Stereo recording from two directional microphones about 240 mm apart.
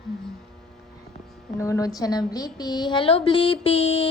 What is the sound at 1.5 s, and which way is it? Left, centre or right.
A woman's voice, centre.